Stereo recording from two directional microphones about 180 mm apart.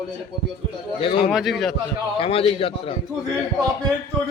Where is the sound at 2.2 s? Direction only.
30° left (ahead or behind).